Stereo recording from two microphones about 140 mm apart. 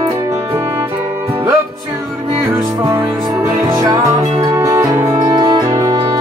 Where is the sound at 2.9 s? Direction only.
25° right (ahead or behind).